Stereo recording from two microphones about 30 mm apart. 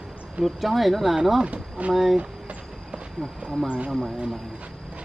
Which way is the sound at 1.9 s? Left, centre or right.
Centre.